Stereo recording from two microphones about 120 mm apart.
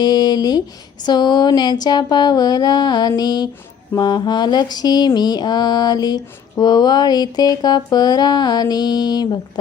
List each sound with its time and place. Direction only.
0.0 s mantra: 35° left (ahead or behind)